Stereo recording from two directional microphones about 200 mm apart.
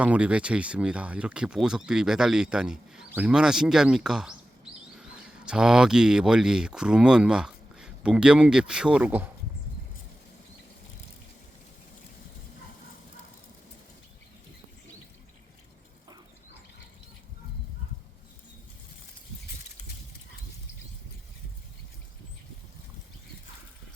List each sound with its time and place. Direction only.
0.0 s speech: 5° right (ahead or behind)
5.5 s speech: 5° right (ahead or behind)